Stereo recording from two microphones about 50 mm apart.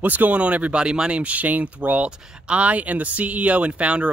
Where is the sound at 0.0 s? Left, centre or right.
Right.